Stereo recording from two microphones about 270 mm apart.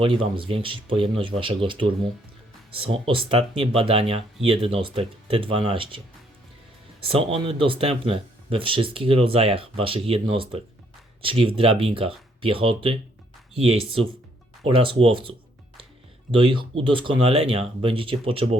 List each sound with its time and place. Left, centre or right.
0.0 s speech: centre
7.1 s speech: right